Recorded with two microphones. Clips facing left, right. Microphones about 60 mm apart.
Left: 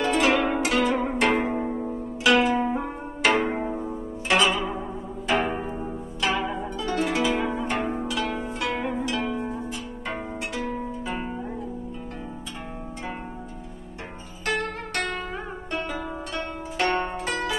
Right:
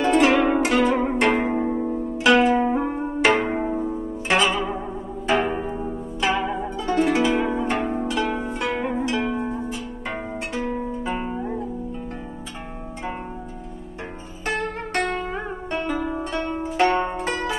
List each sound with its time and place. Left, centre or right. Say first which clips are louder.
0.0 s zither: right 5 dB; centre
0.3 s zither: right 4 dB; centre
2.3 s music: right 4 dB; centre
4.5 s zither: right 2 dB; centre
9.2 s music: right 3 dB; centre
14.6 s music: right 4 dB; centre
15.7 s zither: right 4 dB; right
16.0 s zither: right 6 dB; centre
16.5 s music: right 5 dB; right